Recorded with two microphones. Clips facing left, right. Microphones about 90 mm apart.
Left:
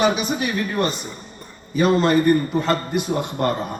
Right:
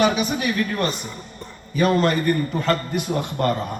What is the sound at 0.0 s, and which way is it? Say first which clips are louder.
A man's voice: even; 30° left (ahead or behind).